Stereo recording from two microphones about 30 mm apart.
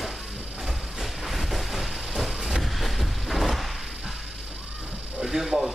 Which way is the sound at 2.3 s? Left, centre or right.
Centre.